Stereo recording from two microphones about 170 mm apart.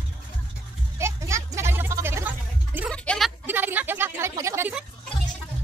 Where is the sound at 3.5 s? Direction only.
10° right (ahead or behind).